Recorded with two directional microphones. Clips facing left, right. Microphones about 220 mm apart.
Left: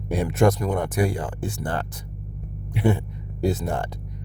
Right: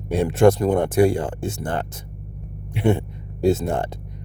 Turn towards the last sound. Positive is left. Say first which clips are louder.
# right 5 dB
turn(degrees=-25)  # may be behind; listen again after turning